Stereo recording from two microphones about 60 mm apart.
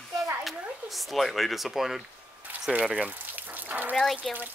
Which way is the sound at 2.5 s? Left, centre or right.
Right.